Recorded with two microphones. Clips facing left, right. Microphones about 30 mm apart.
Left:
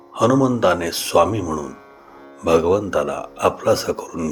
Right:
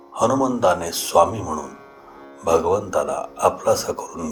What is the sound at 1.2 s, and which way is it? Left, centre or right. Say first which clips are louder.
Speech: even; left.